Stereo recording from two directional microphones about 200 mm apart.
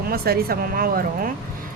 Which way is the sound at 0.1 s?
50° right (ahead or behind).